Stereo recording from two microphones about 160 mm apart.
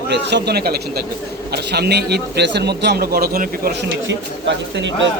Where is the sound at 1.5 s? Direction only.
90° right; by 3.9 s 70° right (ahead or behind).